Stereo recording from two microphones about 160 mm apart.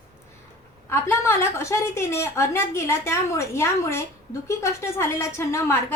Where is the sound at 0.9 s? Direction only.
15° left (ahead or behind).